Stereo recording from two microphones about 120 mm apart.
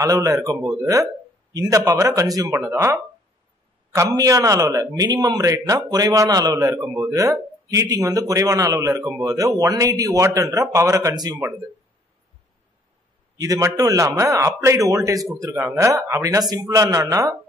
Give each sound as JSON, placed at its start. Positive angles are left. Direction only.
{"t": 0.0, "sound": "speech", "side_deg": -30}
{"t": 13.4, "sound": "speech", "side_deg": -30}